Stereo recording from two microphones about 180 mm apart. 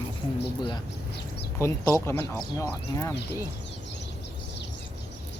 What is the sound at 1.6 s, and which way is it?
Speech, 15° left (ahead or behind).